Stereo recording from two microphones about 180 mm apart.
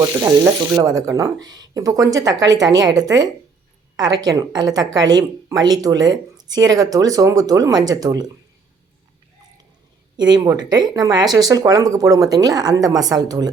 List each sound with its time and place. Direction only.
0.2 s a woman's voice: 15° right (ahead or behind)
10.2 s a woman's voice: 25° right (ahead or behind)